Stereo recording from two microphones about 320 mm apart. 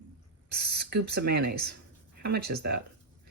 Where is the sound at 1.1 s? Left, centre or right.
Right.